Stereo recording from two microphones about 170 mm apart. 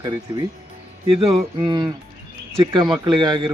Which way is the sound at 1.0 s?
35° right (ahead or behind).